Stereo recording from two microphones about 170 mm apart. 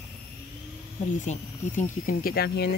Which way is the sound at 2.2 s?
70° left (ahead or behind).